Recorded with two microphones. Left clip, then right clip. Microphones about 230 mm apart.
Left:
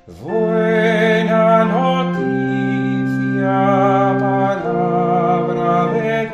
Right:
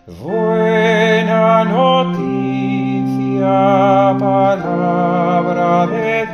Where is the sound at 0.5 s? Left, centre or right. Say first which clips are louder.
Right 3 dB; right.